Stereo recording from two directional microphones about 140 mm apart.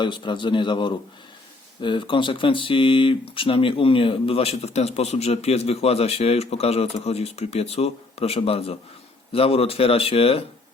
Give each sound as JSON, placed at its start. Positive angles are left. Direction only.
{"t": 0.0, "sound": "a man's voice", "side_deg": 35}